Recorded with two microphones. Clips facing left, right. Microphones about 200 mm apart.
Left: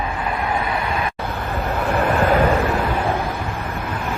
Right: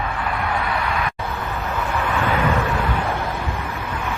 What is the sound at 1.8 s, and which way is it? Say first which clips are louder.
Vehicle: left 6 dB; 50° left (ahead or behind).